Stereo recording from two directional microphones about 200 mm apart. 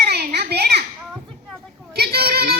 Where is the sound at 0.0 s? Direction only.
55° right (ahead or behind).